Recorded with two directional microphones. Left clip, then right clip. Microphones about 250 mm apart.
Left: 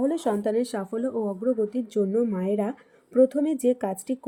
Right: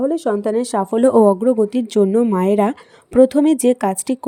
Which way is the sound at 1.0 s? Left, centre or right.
Right.